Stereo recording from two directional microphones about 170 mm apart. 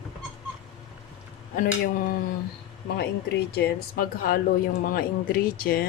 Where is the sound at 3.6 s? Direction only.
70° left (ahead or behind).